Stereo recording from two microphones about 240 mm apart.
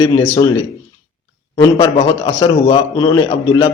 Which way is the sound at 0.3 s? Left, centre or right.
Centre.